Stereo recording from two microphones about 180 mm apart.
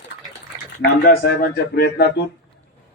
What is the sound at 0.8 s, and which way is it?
A man's voice, 55° left (ahead or behind).